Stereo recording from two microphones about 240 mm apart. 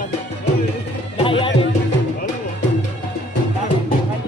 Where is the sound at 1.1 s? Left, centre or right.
Left.